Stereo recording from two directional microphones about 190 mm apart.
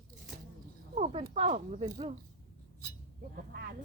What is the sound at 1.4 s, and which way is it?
Speech, 35° right (ahead or behind).